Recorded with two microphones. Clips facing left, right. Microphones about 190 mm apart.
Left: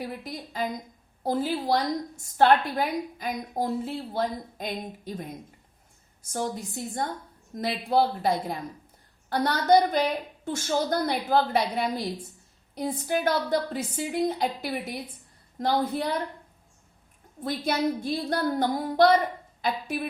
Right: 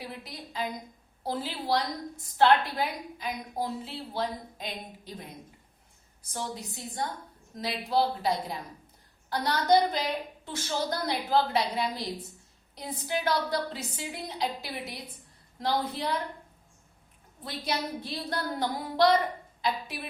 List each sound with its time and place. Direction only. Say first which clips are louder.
0.0 s a woman's voice: left 6 dB; 45° left (ahead or behind)
17.4 s a woman's voice: left 7 dB; 50° left (ahead or behind)